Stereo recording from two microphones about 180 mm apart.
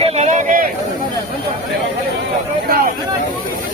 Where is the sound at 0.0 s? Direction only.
40° right (ahead or behind).